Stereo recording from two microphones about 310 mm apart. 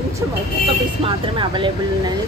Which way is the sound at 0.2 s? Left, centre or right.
Centre.